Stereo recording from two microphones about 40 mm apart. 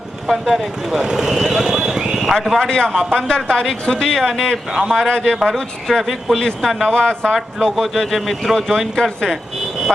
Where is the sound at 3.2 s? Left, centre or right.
Left.